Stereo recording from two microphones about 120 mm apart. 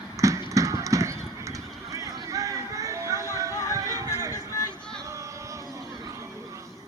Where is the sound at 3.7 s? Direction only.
25° right (ahead or behind).